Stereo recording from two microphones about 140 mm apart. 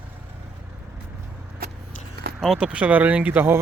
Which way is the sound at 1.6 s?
90° right.